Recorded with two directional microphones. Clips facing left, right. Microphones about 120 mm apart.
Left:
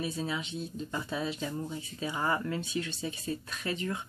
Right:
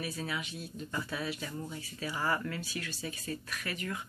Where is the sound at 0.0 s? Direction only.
25° left (ahead or behind).